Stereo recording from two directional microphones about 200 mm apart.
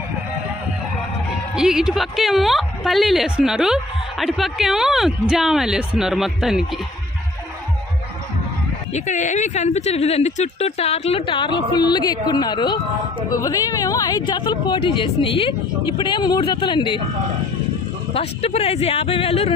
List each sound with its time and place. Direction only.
1.5 s speech: 5° right (ahead or behind)
8.9 s speech: 35° left (ahead or behind)
18.1 s speech: 30° left (ahead or behind)